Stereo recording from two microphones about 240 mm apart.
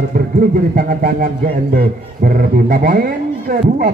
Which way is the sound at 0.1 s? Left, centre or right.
Right.